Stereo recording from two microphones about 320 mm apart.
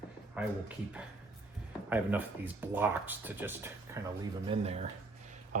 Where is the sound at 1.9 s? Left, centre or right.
Centre.